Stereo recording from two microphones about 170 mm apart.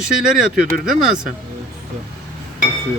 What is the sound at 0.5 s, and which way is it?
Speech, 5° right (ahead or behind).